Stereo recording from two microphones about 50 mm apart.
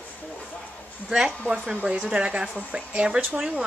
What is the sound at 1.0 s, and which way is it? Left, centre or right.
Speech, centre.